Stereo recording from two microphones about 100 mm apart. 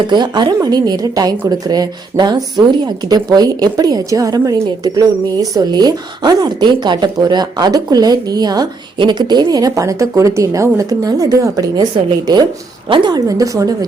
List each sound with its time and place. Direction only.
0.1 s a woman's voice: 45° right (ahead or behind)
12.9 s a woman's voice: 55° right (ahead or behind)
13.1 s a woman's voice: 35° right (ahead or behind)